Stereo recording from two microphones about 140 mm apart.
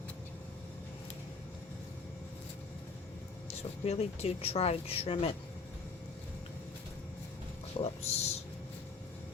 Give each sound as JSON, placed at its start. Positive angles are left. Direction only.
{"t": 3.6, "sound": "speech", "side_deg": 45}
{"t": 7.8, "sound": "speech", "side_deg": 50}